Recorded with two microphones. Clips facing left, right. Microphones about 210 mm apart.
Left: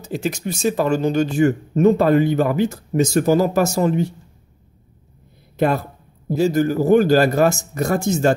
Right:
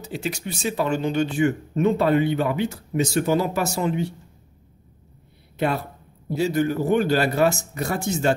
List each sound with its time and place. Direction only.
0.0 s speech: 45° left (ahead or behind)
5.6 s speech: 45° left (ahead or behind)